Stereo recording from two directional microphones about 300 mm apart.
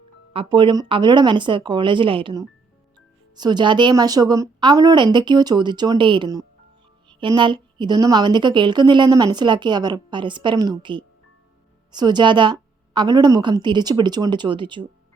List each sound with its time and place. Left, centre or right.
0.3 s a woman's voice: centre